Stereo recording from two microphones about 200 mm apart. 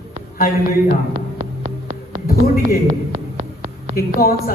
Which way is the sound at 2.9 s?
25° right (ahead or behind).